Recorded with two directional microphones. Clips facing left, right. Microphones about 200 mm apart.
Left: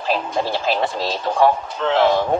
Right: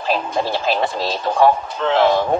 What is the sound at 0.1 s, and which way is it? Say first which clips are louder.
Speech: right 1 dB; 45° right (ahead or behind).